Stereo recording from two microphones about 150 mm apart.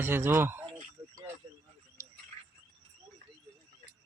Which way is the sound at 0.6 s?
35° right (ahead or behind).